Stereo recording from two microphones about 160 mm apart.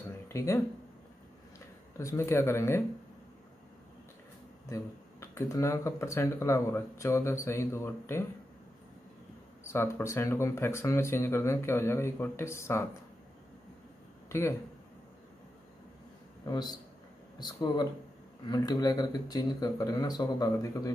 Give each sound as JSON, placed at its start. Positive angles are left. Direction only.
{"t": 0.3, "sound": "speech", "side_deg": 20}
{"t": 2.0, "sound": "speech", "side_deg": 20}
{"t": 4.6, "sound": "speech", "side_deg": 20}
{"t": 9.7, "sound": "speech", "side_deg": 15}
{"t": 16.4, "sound": "speech", "side_deg": 25}